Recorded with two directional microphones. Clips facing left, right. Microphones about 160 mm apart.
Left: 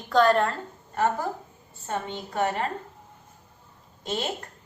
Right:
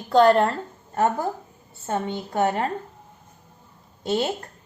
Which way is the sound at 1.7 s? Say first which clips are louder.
Right 5 dB; 40° right (ahead or behind).